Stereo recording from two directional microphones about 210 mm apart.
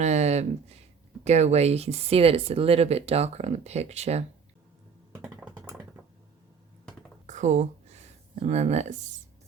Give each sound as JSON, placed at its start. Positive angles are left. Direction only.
{"t": 0.0, "sound": "speech", "side_deg": -35}
{"t": 5.5, "sound": "computer keyboard", "side_deg": -15}
{"t": 7.3, "sound": "a sound", "side_deg": -35}